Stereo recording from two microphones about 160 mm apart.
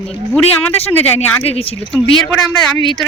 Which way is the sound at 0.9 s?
10° left (ahead or behind).